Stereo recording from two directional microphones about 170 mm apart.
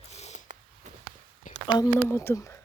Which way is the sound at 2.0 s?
15° left (ahead or behind).